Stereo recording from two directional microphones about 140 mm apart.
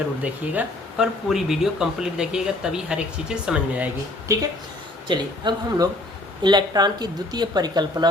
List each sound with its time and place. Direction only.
0.2 s speech: 5° right (ahead or behind)
4.3 s a woman's voice: 20° right (ahead or behind)
5.0 s a woman's voice: 35° right (ahead or behind)